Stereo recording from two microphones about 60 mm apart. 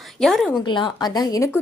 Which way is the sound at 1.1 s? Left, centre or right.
Left.